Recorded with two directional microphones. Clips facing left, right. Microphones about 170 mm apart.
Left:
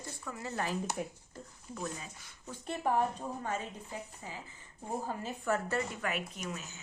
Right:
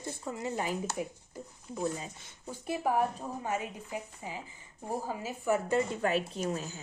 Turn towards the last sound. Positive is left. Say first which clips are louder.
# right 8 dB
turn(degrees=-35)  # may be behind; listen again after turning